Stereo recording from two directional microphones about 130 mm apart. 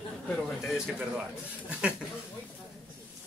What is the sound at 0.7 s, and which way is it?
Speech, 5° right (ahead or behind).